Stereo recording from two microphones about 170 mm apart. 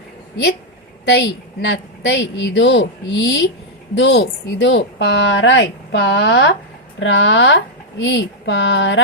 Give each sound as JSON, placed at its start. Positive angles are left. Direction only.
{"t": 1.6, "sound": "speech", "side_deg": 90}